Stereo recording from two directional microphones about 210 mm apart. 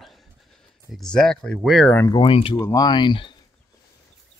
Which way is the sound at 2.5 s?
15° left (ahead or behind).